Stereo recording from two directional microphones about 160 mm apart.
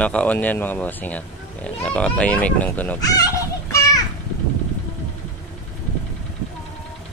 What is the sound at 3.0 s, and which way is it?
Children playing, 25° left (ahead or behind).